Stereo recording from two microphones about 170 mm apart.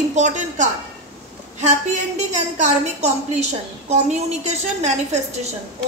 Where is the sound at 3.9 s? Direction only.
40° right (ahead or behind).